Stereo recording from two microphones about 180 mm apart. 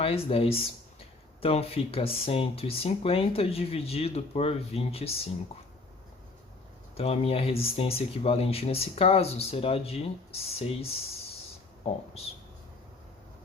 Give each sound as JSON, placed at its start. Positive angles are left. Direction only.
{"t": 0.0, "sound": "speech", "side_deg": 30}
{"t": 6.9, "sound": "speech", "side_deg": 35}